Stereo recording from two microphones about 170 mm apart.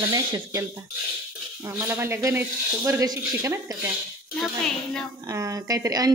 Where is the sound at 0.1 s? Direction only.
20° right (ahead or behind).